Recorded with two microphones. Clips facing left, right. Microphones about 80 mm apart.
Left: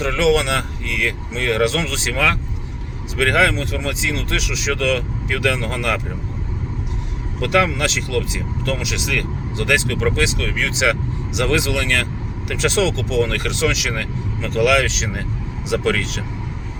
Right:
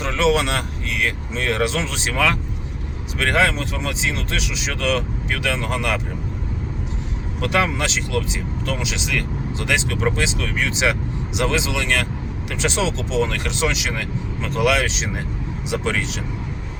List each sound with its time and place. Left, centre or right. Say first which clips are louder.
0.2 s speech: left 1 dB; right
3.2 s speech: left 2 dB; right
7.4 s speech: left 3 dB; right